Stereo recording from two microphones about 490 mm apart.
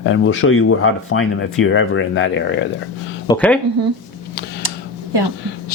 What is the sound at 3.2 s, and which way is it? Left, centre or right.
Speech, centre.